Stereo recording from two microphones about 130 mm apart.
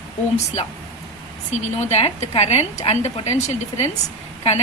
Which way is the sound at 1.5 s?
60° left (ahead or behind).